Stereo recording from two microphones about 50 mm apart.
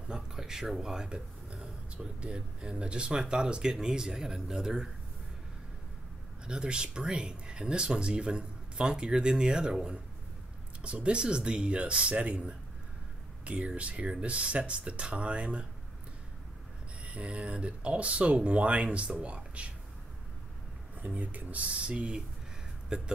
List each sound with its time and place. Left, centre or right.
0.1 s speech: centre
6.4 s speech: centre
17.0 s speech: right
21.2 s speech: right